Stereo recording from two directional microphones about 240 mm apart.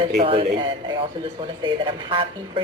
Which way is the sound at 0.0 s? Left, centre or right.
Right.